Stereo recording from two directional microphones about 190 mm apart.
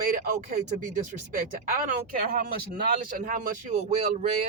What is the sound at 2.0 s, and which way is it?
Speech, 50° right (ahead or behind).